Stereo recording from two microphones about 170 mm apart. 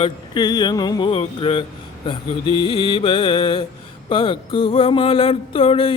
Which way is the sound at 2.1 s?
30° left (ahead or behind).